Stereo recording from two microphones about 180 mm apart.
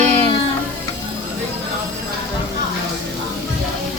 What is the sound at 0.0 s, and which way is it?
Music, 10° left (ahead or behind).